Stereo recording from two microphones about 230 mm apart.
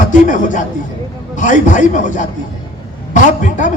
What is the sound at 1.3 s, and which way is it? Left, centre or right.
Speech, left.